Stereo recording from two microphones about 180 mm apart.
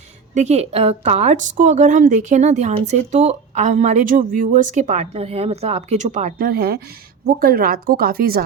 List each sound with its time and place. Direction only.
0.3 s a woman's voice: 35° right (ahead or behind)
6.5 s speech: 60° right (ahead or behind)